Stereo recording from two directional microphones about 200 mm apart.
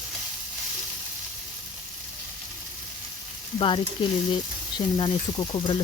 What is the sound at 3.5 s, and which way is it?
Speech, 25° left (ahead or behind).